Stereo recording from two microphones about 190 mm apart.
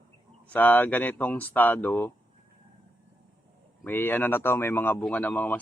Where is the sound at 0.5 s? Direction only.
10° left (ahead or behind).